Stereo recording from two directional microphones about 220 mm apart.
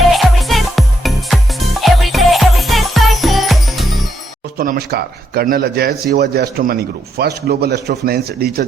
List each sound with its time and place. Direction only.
0.1 s music: centre (ahead or behind)
4.5 s speech: 40° right (ahead or behind)